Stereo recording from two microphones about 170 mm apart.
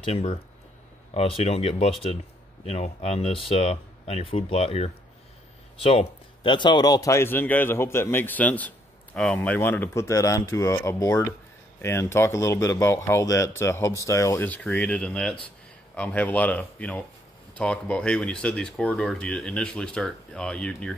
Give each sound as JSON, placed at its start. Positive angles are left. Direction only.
{"t": 0.0, "sound": "a man's voice", "side_deg": 40}